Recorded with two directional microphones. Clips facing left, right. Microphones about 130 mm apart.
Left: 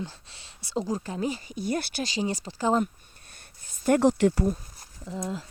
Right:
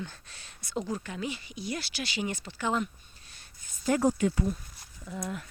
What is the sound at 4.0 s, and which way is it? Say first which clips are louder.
Speech: left 5 dB; 75° left (ahead or behind).